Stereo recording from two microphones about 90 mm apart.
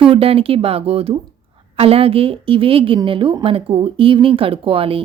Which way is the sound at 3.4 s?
85° right.